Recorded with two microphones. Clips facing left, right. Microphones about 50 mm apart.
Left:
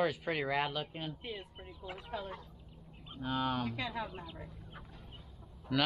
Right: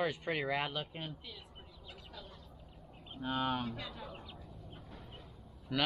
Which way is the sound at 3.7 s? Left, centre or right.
Left.